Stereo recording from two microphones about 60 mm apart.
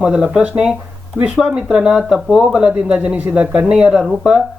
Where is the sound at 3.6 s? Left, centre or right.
Centre.